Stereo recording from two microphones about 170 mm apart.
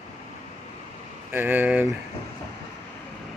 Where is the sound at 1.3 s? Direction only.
10° right (ahead or behind).